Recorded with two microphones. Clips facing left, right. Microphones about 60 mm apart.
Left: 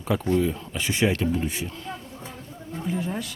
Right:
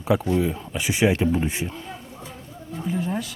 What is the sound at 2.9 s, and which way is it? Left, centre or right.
Speech, centre.